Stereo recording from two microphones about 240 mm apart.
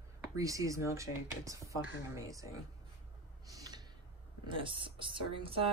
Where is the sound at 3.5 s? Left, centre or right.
Centre.